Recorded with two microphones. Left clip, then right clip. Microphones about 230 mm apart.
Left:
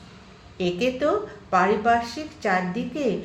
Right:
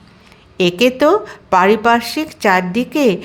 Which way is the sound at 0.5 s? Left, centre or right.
Right.